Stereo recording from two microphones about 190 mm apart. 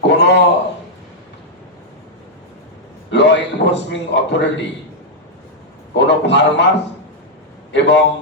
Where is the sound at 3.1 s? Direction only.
65° left (ahead or behind).